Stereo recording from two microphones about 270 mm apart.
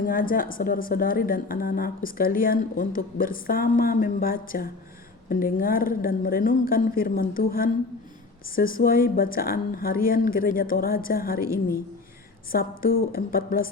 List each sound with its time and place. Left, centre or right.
0.0 s a woman's voice: left